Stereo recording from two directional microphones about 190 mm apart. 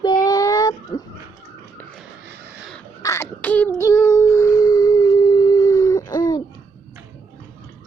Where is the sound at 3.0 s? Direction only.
15° left (ahead or behind).